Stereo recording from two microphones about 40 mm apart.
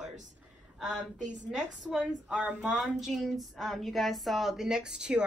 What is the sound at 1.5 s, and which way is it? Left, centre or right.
Speech, centre.